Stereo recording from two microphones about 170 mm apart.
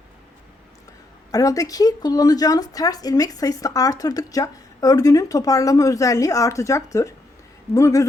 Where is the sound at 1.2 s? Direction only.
20° left (ahead or behind).